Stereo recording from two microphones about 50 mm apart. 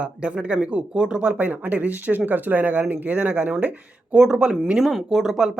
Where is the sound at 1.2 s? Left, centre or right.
Right.